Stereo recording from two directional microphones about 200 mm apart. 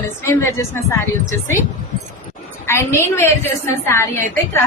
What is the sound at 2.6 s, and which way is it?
A woman's voice, 10° left (ahead or behind).